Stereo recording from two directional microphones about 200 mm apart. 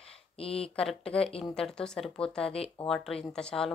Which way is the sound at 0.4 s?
30° left (ahead or behind).